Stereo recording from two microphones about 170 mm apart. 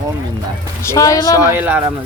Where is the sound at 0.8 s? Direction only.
20° left (ahead or behind).